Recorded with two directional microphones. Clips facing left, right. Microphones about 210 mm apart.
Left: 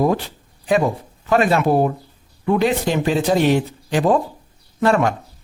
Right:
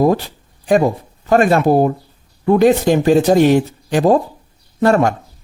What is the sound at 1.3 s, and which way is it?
Speech, 45° right (ahead or behind).